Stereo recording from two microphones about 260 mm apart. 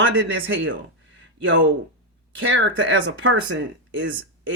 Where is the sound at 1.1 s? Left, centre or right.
Right.